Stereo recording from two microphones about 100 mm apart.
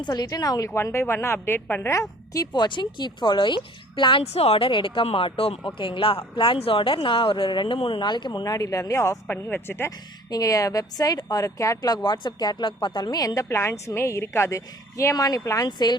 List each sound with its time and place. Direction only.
0.0 s speech: 40° left (ahead or behind)
0.7 s a woman's voice: 25° left (ahead or behind)
1.9 s a woman's voice: 35° left (ahead or behind)
2.5 s speech: 50° left (ahead or behind); by 9.9 s 25° left (ahead or behind)
10.2 s speech: 40° left (ahead or behind)
12.0 s speech: 50° left (ahead or behind)